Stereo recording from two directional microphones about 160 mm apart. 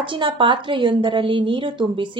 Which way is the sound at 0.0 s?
30° right (ahead or behind).